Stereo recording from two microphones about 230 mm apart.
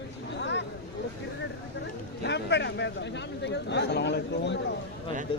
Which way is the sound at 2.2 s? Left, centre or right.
Left.